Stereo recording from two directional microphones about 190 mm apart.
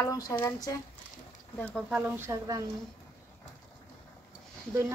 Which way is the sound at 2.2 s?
20° right (ahead or behind).